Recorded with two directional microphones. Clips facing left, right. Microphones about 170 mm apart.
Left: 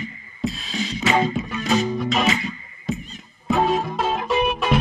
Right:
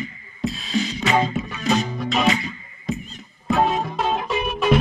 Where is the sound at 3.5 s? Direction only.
Centre (ahead or behind).